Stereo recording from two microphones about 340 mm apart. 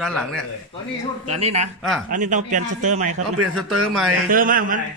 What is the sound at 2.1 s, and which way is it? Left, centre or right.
A man's voice, right.